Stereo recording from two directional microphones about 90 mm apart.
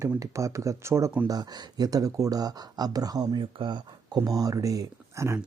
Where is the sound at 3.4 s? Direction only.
60° right (ahead or behind).